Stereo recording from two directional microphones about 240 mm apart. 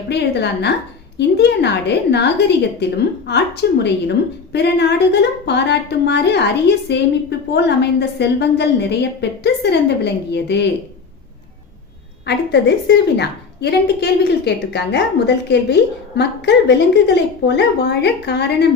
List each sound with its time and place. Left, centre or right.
0.1 s a woman's voice: left
12.2 s a woman's voice: left